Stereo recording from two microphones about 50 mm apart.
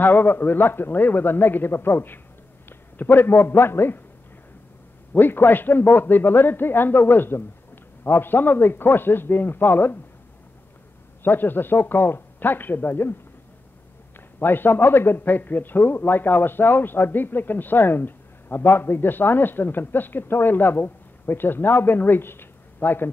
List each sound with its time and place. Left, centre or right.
0.0 s a man's voice: left
5.1 s a man's voice: left
11.2 s a man's voice: left
14.4 s a man's voice: left